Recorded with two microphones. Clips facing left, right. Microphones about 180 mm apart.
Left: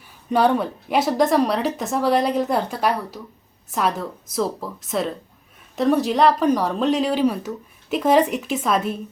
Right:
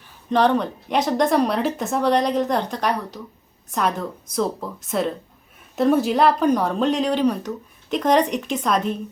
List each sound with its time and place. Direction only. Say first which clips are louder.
0.3 s speech: even; 10° left (ahead or behind)